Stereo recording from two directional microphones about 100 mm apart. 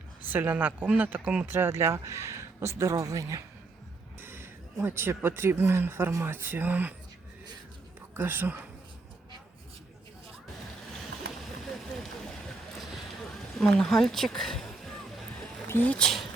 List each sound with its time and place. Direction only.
0.3 s speech: 20° right (ahead or behind)
4.2 s speech: 25° right (ahead or behind)
8.1 s speech: 20° right (ahead or behind)
12.8 s a sound: centre (ahead or behind)
15.6 s a sound: 25° left (ahead or behind)
15.9 s speech: 5° left (ahead or behind)